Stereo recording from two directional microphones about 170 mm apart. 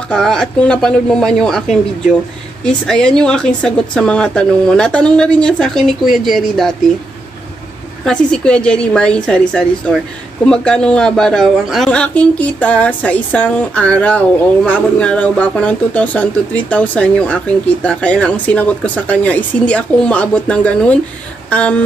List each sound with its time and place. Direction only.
0.1 s a woman's voice: 5° left (ahead or behind)
8.0 s a woman's voice: 5° left (ahead or behind)